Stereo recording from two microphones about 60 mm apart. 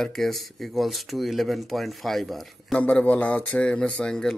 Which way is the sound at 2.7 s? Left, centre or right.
Left.